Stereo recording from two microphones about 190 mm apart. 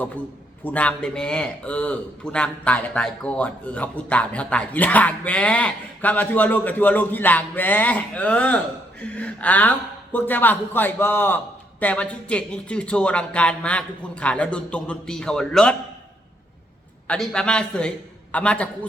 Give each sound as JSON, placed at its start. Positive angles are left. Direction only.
{"t": 0.6, "sound": "a man's voice", "side_deg": 5}
{"t": 17.1, "sound": "speech", "side_deg": 5}